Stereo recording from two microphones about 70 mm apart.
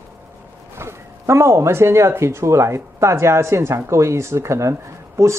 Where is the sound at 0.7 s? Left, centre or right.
Right.